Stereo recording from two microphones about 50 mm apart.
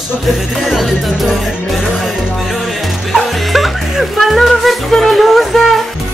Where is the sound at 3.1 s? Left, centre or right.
Centre.